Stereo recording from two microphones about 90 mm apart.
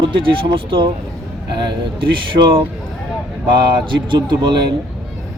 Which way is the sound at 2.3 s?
65° right (ahead or behind).